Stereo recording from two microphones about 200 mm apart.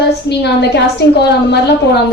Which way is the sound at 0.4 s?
60° left (ahead or behind).